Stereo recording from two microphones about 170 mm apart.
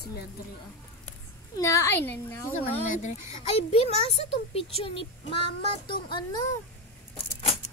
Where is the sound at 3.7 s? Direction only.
40° left (ahead or behind).